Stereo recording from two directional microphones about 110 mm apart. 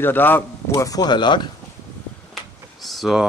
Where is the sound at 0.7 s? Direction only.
30° left (ahead or behind).